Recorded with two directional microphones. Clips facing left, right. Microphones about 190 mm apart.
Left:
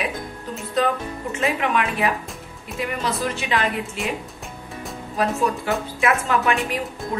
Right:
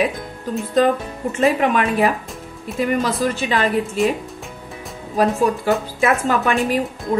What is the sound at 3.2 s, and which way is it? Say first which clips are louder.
Speech: right 4 dB; 40° right (ahead or behind).